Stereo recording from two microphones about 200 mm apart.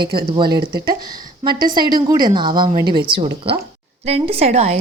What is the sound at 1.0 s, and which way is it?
A woman's voice, 20° right (ahead or behind).